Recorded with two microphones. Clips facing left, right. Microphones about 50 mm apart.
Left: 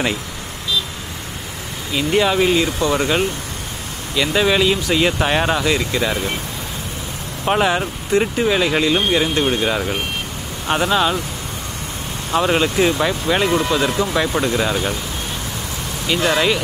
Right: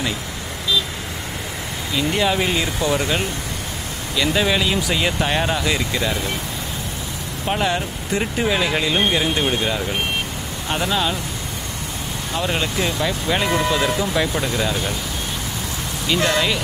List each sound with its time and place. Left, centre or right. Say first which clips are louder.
2.0 s speech: left 3 dB; centre
2.9 s speech: left 3 dB; centre
7.5 s speech: left 5 dB; centre
8.1 s speech: left 4 dB; centre
12.4 s speech: left 7 dB; centre
16.1 s speech: left 2 dB; centre